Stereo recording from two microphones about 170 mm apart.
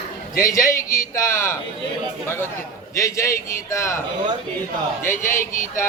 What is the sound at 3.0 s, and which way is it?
A man's voice, 20° left (ahead or behind).